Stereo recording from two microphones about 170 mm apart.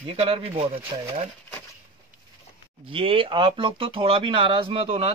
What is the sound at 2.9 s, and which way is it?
Speech, 30° right (ahead or behind).